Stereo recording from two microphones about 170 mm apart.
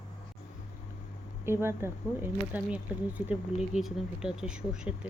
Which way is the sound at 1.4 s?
15° right (ahead or behind).